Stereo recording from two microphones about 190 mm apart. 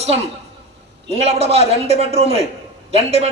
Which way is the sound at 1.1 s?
35° right (ahead or behind).